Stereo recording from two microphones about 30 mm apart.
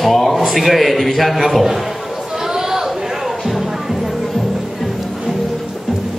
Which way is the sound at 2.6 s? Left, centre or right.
Centre.